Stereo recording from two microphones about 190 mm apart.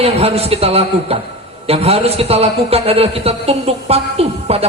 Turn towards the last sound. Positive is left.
turn(degrees=-30)  # may be behind; listen again after turning